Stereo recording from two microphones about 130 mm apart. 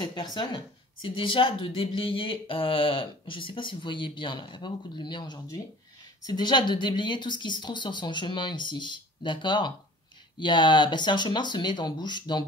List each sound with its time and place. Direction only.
0.0 s speech: 35° left (ahead or behind)